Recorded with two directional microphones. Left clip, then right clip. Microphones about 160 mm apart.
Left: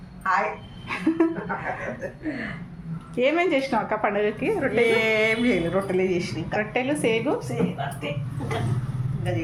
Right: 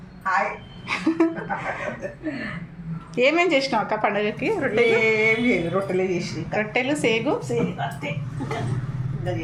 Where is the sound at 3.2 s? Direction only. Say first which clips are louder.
Right 3 dB; 10° left (ahead or behind).